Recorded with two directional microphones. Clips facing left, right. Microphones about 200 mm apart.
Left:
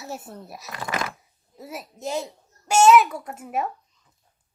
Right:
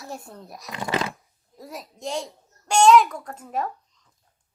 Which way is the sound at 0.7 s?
25° right (ahead or behind).